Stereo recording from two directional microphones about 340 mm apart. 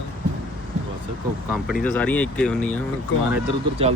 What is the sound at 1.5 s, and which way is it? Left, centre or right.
Speech, centre.